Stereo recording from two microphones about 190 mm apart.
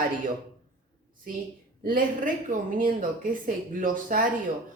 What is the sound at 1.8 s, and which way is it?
Speech, 45° right (ahead or behind).